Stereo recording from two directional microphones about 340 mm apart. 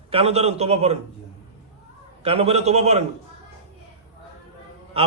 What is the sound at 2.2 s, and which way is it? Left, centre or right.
Speech, centre.